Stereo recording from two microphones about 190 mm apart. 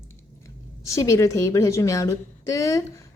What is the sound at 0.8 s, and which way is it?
A woman's voice, 15° left (ahead or behind).